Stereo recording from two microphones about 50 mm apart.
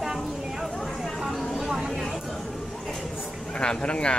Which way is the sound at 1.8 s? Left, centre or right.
Centre.